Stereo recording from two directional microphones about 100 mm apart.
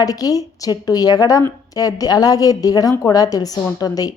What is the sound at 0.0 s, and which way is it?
Speech, 40° left (ahead or behind).